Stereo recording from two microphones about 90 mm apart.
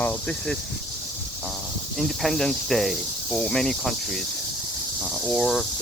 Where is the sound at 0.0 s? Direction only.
20° left (ahead or behind).